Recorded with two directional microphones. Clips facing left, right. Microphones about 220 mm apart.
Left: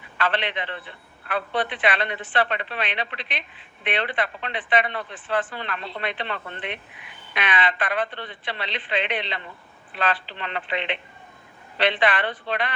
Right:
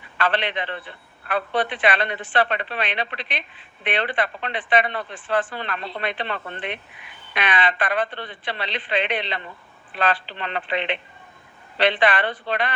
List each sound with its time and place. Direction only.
0.2 s a man's voice: 40° right (ahead or behind)